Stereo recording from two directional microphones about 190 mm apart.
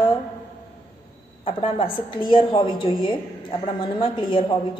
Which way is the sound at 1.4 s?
30° left (ahead or behind).